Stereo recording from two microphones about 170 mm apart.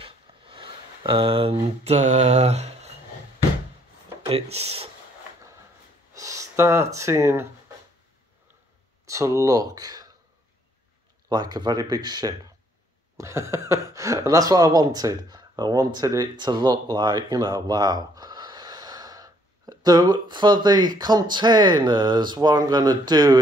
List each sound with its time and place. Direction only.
0.0 s a sound: 30° right (ahead or behind)
4.3 s speech: 35° right (ahead or behind)
6.1 s speech: 20° right (ahead or behind)
9.0 s speech: 20° right (ahead or behind)
11.2 s speech: 25° right (ahead or behind)